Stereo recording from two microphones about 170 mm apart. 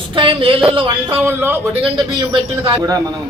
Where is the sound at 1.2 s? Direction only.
15° right (ahead or behind).